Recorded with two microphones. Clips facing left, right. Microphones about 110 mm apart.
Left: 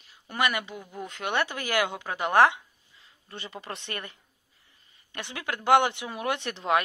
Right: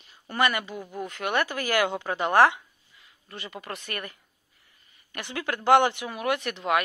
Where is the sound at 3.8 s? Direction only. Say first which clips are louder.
Right 2 dB; 25° left (ahead or behind).